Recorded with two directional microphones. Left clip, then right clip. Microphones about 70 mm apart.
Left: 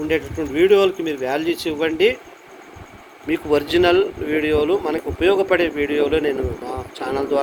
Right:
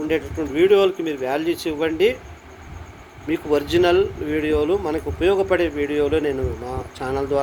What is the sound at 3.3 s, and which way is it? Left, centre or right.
Speech, centre.